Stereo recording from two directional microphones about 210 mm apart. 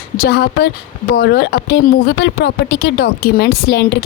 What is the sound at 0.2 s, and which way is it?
A woman's voice, 50° left (ahead or behind).